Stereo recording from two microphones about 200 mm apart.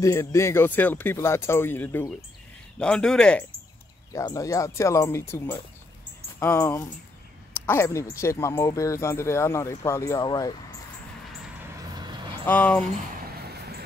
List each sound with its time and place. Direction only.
0.0 s speech: 15° left (ahead or behind)
4.1 s speech: 15° left (ahead or behind)
11.9 s a sound: 20° right (ahead or behind)
12.4 s speech: 5° left (ahead or behind)